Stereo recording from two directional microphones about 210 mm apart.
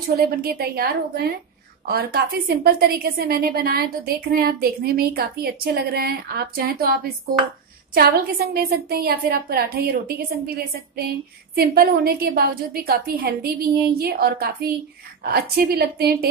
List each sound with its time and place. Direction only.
0.1 s a woman's voice: 45° right (ahead or behind)
8.5 s a woman's voice: 45° right (ahead or behind)